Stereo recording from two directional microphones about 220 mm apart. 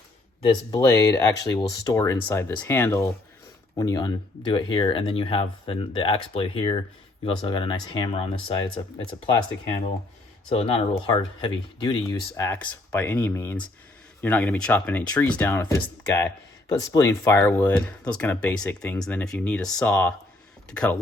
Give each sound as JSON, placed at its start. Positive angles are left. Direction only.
{"t": 0.4, "sound": "speech", "side_deg": 15}